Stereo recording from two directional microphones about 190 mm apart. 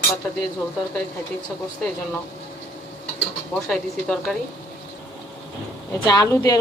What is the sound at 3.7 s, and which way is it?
Speech, centre (ahead or behind).